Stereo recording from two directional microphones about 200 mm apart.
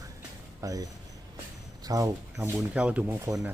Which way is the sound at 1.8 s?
15° right (ahead or behind).